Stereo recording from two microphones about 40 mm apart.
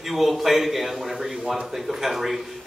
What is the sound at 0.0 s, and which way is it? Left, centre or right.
Speech, centre.